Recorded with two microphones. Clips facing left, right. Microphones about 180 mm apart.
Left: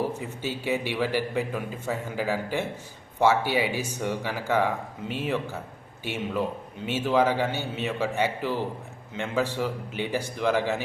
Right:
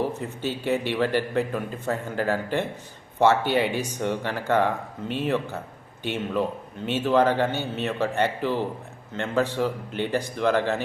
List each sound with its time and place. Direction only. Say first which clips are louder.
0.2 s a man's voice: right 3 dB; 10° left (ahead or behind)